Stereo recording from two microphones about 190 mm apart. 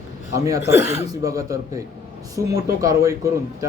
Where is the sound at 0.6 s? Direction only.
65° left (ahead or behind).